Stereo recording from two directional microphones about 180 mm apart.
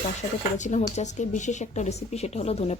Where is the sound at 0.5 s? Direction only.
40° left (ahead or behind).